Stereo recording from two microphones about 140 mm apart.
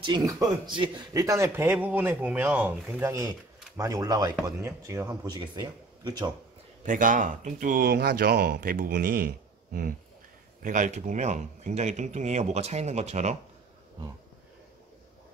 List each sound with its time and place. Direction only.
0.0 s speech: 30° right (ahead or behind)
6.9 s speech: 70° right (ahead or behind); by 9.9 s 90° right
10.6 s speech: 65° right (ahead or behind)